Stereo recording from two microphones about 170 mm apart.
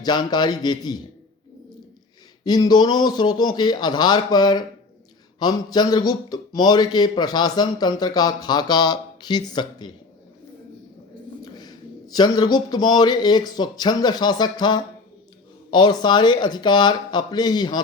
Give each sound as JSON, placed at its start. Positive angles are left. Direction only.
{"t": 0.0, "sound": "a man's voice", "side_deg": 25}
{"t": 2.4, "sound": "a man's voice", "side_deg": 25}
{"t": 11.4, "sound": "a man's voice", "side_deg": 25}